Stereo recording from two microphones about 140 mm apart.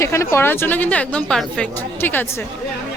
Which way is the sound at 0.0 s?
20° left (ahead or behind).